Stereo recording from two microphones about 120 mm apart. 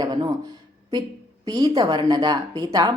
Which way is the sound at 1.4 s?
35° right (ahead or behind).